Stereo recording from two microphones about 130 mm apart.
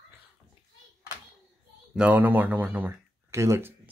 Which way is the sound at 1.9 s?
10° right (ahead or behind).